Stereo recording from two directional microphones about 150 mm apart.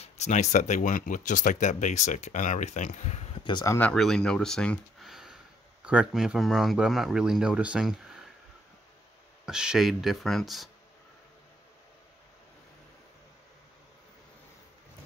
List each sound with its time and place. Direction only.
0.0 s speech: 50° left (ahead or behind)
3.6 s speech: 15° left (ahead or behind)
3.9 s speech: 5° left (ahead or behind)
9.5 s speech: 5° right (ahead or behind)